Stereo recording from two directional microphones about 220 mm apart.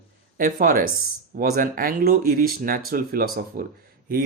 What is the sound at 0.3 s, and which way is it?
Speech, 40° right (ahead or behind).